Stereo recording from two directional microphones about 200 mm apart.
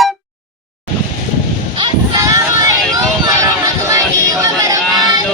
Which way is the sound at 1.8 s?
15° right (ahead or behind).